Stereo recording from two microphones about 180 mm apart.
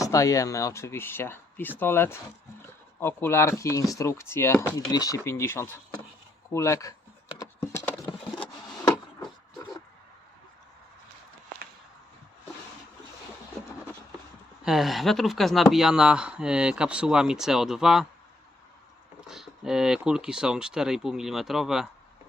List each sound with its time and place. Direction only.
0.0 s speech: 20° left (ahead or behind)
7.3 s patter: 15° left (ahead or behind)
14.6 s speech: centre (ahead or behind)
19.2 s speech: 5° right (ahead or behind)